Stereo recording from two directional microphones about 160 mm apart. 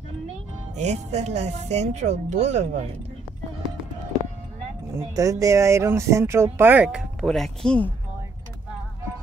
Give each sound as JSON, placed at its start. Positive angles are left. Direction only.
{"t": 0.7, "sound": "speech", "side_deg": -45}
{"t": 5.1, "sound": "speech", "side_deg": -20}